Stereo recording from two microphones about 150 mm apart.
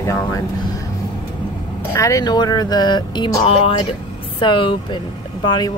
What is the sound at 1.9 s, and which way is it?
Speech, 20° left (ahead or behind).